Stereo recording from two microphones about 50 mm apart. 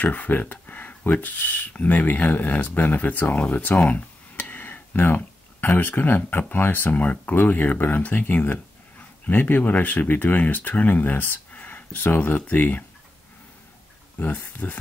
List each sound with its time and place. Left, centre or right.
0.0 s speech: left
14.2 s speech: left